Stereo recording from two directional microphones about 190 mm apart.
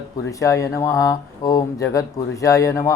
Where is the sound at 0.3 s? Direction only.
15° left (ahead or behind).